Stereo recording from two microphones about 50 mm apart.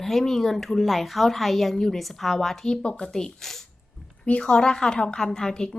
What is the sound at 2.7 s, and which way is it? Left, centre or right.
Speech, centre.